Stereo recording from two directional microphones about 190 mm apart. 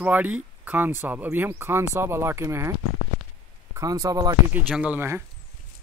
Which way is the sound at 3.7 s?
20° right (ahead or behind).